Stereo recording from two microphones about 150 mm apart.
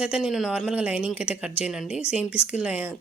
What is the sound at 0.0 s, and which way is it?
Speech, 5° right (ahead or behind).